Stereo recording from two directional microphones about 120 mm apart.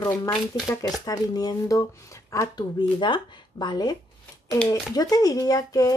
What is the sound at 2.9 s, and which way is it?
Speech, 40° left (ahead or behind).